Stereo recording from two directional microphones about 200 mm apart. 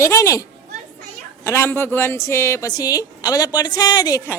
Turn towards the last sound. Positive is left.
turn(degrees=20)  # may be behind; listen again after turning